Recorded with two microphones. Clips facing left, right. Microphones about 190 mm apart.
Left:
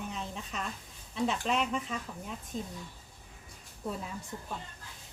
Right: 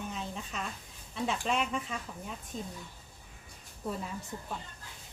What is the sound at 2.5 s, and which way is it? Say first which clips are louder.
Speech: left 2 dB; 35° left (ahead or behind).